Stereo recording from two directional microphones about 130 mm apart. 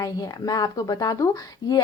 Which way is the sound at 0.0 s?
30° left (ahead or behind).